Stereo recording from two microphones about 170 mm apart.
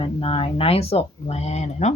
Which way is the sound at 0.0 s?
35° left (ahead or behind).